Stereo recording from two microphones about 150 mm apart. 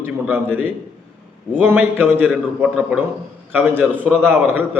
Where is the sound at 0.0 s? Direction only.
15° right (ahead or behind).